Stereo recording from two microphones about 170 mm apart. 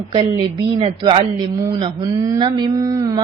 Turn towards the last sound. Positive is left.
turn(degrees=-20)  # may be behind; listen again after turning